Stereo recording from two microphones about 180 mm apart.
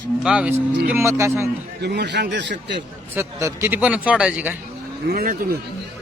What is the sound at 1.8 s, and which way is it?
A man's voice, 65° right (ahead or behind).